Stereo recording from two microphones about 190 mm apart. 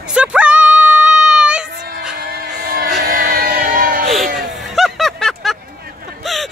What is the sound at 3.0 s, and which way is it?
Music, 45° right (ahead or behind).